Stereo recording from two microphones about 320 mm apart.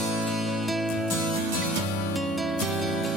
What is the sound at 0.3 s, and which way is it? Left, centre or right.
Music, centre.